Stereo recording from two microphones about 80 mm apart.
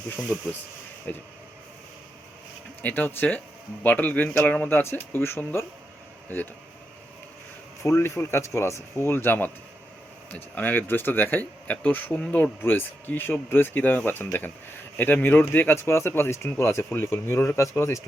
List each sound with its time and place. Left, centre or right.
1.1 s speech: centre
2.8 s speech: left
7.8 s speech: left